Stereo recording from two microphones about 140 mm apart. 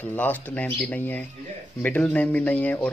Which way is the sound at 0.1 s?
10° left (ahead or behind).